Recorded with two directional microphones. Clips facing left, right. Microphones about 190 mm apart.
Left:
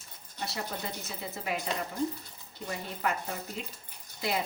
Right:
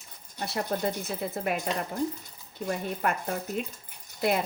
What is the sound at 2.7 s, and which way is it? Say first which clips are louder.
Speech: right 4 dB; 55° right (ahead or behind).